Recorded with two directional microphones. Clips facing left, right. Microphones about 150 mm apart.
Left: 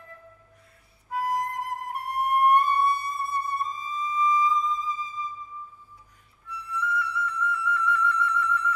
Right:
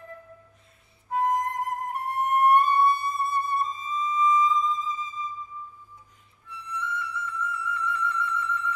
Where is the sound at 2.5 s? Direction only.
20° right (ahead or behind).